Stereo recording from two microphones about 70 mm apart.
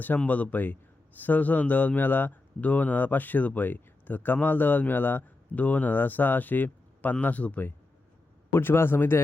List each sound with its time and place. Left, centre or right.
0.2 s a man's voice: left
8.5 s a man's voice: left